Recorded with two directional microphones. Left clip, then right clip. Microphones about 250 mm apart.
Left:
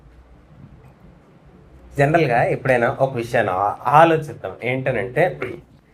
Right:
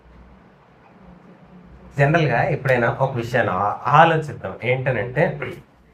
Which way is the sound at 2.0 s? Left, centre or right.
Centre.